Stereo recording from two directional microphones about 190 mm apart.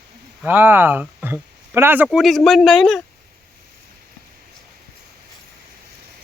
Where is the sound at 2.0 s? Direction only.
Centre (ahead or behind).